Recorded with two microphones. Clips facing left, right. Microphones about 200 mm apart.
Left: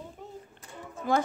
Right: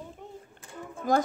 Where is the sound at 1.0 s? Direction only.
45° right (ahead or behind).